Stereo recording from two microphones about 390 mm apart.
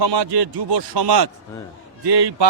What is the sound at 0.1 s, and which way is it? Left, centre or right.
A man's voice, right.